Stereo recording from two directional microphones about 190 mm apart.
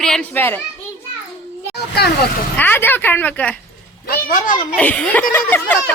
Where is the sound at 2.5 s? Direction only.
10° left (ahead or behind).